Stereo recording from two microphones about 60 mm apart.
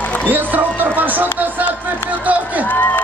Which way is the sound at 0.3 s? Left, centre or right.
Right.